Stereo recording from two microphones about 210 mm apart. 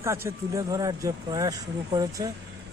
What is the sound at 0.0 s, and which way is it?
A man's voice, 15° right (ahead or behind).